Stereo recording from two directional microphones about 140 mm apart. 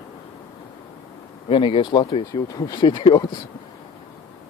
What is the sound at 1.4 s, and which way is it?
Speech, 40° left (ahead or behind).